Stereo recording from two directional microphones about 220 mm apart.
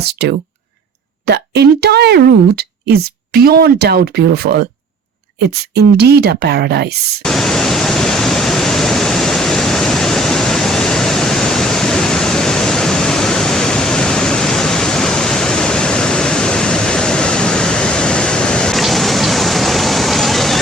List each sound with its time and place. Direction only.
0.0 s speech: 50° right (ahead or behind)
5.7 s speech: 45° right (ahead or behind)
7.2 s pink noise: centre (ahead or behind)